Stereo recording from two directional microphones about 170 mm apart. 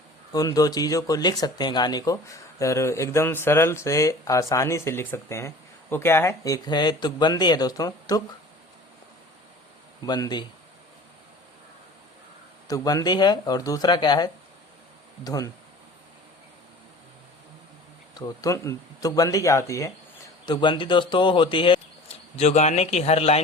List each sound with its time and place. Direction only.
0.3 s speech: 20° left (ahead or behind)
10.1 s speech: 25° left (ahead or behind)
12.6 s speech: 20° left (ahead or behind)
18.2 s speech: 20° left (ahead or behind)
22.4 s speech: 40° left (ahead or behind)